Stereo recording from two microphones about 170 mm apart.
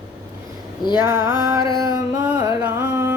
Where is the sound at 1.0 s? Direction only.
20° right (ahead or behind).